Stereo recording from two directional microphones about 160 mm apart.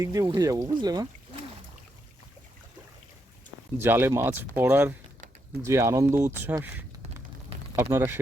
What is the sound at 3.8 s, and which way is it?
Speech, 15° right (ahead or behind).